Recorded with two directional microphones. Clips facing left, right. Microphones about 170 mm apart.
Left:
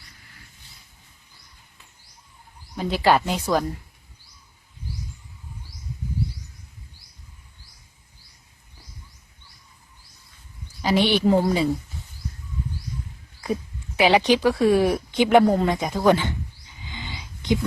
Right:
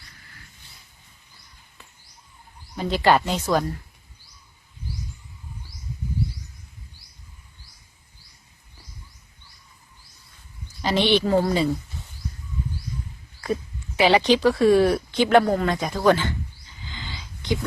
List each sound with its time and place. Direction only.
2.7 s speech: 5° left (ahead or behind)
10.8 s speech: 10° left (ahead or behind)
13.4 s speech: 5° left (ahead or behind)
16.9 s a sound: 15° left (ahead or behind)